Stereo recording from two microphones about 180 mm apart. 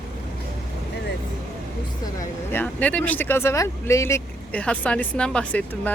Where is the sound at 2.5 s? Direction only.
5° left (ahead or behind).